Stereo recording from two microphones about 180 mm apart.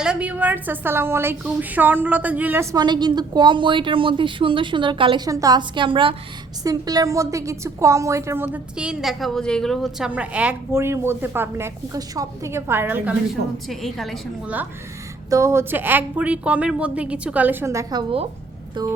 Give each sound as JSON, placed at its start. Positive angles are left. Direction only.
{"t": 0.0, "sound": "a woman's voice", "side_deg": -5}
{"t": 2.7, "sound": "a woman's voice", "side_deg": -25}
{"t": 13.7, "sound": "a woman's voice", "side_deg": 0}
{"t": 15.3, "sound": "a woman's voice", "side_deg": -15}